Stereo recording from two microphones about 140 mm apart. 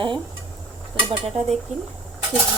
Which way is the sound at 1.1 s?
45° right (ahead or behind).